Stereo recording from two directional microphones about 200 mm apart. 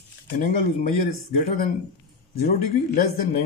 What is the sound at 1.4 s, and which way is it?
A man's voice, 45° left (ahead or behind).